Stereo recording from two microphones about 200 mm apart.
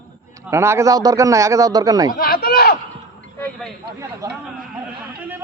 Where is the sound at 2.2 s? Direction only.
50° left (ahead or behind).